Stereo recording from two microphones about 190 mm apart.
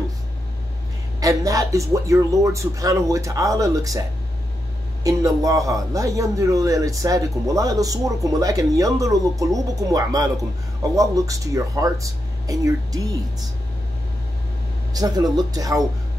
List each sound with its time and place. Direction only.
1.2 s a man's voice: 15° right (ahead or behind)
5.0 s a man's voice: 20° right (ahead or behind)
15.0 s speech: 20° right (ahead or behind)